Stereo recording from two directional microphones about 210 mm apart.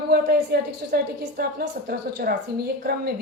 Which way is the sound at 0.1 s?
45° right (ahead or behind).